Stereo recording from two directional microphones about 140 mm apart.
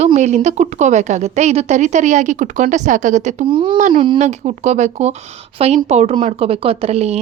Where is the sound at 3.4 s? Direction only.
35° right (ahead or behind).